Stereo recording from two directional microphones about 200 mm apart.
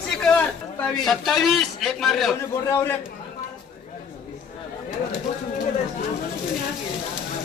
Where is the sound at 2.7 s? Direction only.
15° left (ahead or behind).